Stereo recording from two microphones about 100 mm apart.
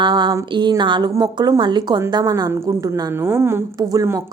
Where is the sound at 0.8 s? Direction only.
50° right (ahead or behind).